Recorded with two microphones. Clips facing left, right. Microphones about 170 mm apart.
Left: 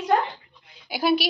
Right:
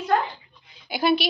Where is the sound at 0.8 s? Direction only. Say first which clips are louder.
Even; 5° left (ahead or behind).